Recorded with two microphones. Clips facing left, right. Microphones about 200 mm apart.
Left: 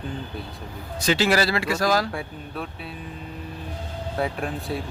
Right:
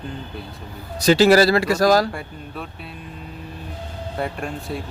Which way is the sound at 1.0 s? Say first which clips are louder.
Right 8 dB; 40° right (ahead or behind).